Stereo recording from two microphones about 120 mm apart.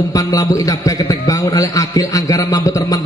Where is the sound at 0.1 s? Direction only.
30° left (ahead or behind).